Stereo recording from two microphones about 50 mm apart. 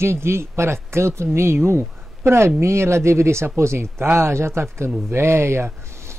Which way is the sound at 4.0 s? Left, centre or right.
Right.